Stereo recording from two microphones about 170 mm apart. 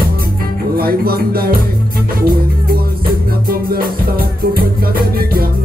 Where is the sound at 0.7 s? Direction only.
65° right (ahead or behind).